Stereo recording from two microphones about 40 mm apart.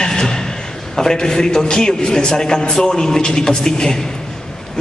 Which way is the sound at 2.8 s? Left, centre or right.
Centre.